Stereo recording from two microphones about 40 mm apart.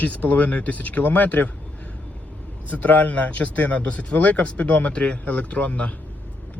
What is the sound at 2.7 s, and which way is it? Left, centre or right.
A man's voice, left.